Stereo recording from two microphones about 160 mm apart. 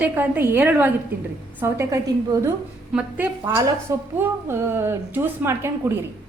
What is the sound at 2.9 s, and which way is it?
A woman's voice, 10° right (ahead or behind).